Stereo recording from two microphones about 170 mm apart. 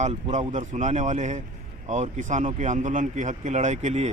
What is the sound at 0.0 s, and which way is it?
Speech, 45° right (ahead or behind).